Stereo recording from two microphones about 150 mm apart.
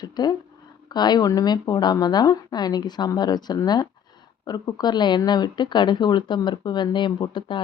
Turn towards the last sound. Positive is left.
turn(degrees=30)  # may be behind; listen again after turning